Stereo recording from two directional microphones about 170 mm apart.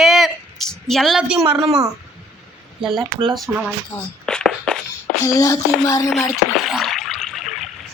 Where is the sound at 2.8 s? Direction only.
Centre (ahead or behind).